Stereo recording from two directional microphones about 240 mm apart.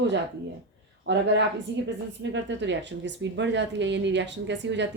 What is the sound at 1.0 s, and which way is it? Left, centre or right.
Speech, right.